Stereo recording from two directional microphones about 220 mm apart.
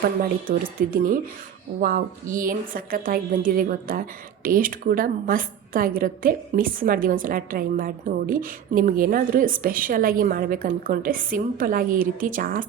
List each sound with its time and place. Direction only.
0.0 s a woman's voice: 40° right (ahead or behind)